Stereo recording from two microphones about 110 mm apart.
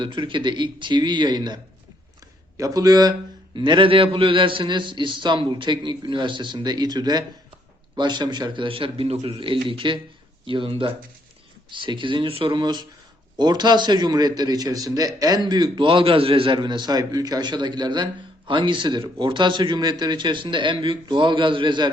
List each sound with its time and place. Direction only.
0.0 s a man's voice: 45° right (ahead or behind)
2.6 s a man's voice: 35° right (ahead or behind)